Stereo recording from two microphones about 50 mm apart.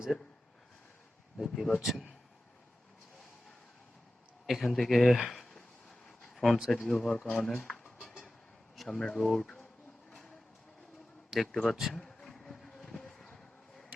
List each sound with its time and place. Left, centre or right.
1.4 s a man's voice: centre
4.4 s a man's voice: centre
6.3 s a sound: centre
6.7 s speech: centre
8.0 s train: centre
8.7 s a sound: centre
9.0 s speech: centre
10.1 s a sound: centre
11.5 s a man's voice: centre
11.9 s vehicle: centre